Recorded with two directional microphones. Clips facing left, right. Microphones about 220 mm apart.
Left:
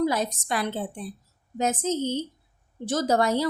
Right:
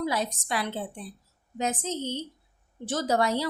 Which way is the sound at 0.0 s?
45° left (ahead or behind).